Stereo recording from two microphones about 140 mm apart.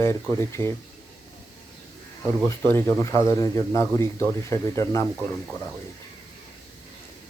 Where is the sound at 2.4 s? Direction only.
15° left (ahead or behind).